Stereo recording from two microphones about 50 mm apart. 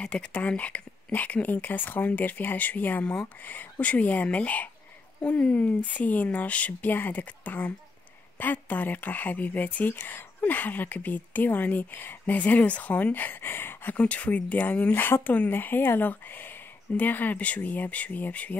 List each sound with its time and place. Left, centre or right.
0.0 s speech: left
13.9 s speech: left
15.5 s speech: left